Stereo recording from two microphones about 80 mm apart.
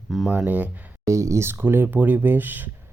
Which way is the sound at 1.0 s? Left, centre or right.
Right.